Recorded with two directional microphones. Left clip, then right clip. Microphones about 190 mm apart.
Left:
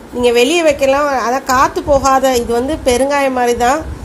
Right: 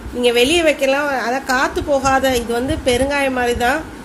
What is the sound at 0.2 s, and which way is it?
A woman's voice, 15° left (ahead or behind).